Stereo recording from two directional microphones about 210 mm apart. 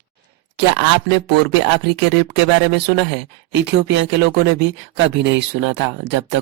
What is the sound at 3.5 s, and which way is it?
Speech, 55° right (ahead or behind).